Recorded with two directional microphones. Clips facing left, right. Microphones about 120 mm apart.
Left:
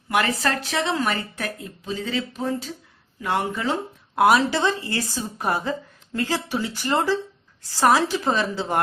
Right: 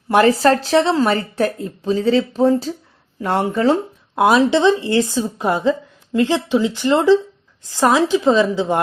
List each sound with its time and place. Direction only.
0.1 s speech: 35° right (ahead or behind)
4.2 s a woman's voice: 20° right (ahead or behind)